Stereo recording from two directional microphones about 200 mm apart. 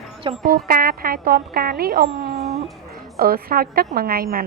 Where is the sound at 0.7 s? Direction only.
45° right (ahead or behind).